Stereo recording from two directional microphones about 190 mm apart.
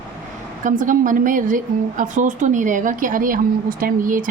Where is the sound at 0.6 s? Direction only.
45° right (ahead or behind).